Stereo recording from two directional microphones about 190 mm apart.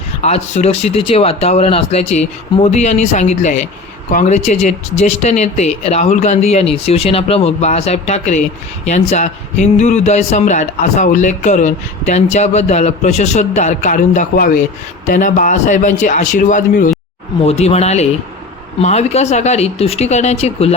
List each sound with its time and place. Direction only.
0.2 s a man's voice: 35° left (ahead or behind)